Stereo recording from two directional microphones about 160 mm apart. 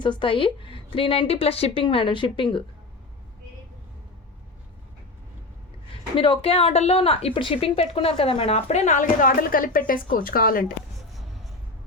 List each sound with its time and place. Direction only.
0.0 s a woman's voice: 30° left (ahead or behind)
6.1 s a woman's voice: 30° left (ahead or behind); by 10.8 s 65° left (ahead or behind)